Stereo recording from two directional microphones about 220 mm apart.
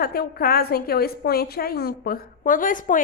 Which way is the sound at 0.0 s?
45° left (ahead or behind).